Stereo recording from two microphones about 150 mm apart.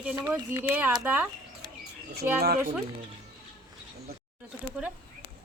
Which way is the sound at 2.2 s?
60° right (ahead or behind).